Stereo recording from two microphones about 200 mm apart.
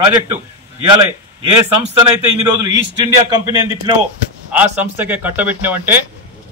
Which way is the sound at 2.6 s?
15° right (ahead or behind).